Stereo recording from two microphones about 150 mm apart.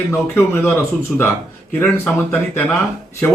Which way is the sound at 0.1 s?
15° left (ahead or behind).